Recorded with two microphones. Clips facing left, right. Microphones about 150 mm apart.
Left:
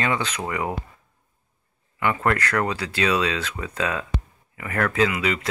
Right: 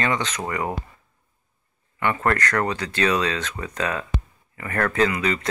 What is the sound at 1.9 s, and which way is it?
Speech, 10° left (ahead or behind).